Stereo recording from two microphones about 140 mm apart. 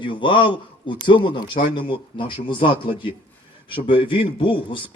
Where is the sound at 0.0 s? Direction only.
35° left (ahead or behind).